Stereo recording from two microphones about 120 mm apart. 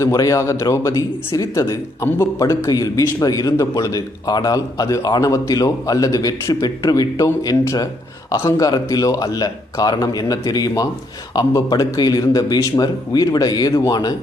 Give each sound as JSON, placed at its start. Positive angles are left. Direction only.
{"t": 0.0, "sound": "a man's voice", "side_deg": 30}